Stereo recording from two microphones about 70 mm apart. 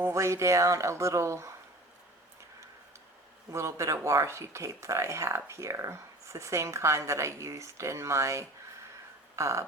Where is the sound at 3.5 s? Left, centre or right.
Right.